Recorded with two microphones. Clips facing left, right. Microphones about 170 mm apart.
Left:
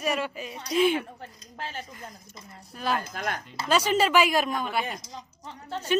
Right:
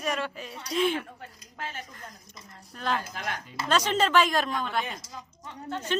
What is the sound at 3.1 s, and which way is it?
Speech, 45° left (ahead or behind).